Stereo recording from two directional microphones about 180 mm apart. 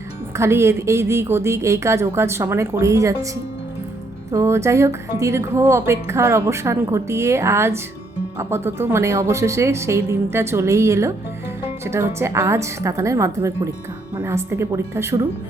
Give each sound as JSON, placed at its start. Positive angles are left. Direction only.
{"t": 0.3, "sound": "speech", "side_deg": -15}
{"t": 4.3, "sound": "speech", "side_deg": -15}